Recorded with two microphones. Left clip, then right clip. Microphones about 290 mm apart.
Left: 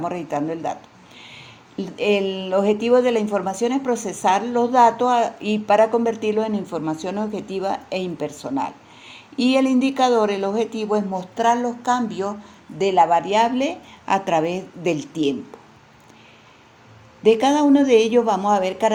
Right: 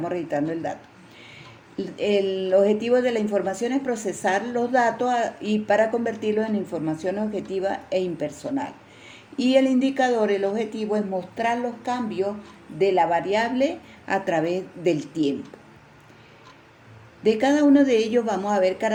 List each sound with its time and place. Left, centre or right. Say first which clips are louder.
0.0 s speech: left 1 dB; centre
17.2 s speech: left 3 dB; centre